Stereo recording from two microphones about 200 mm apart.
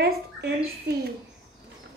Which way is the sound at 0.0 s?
55° right (ahead or behind).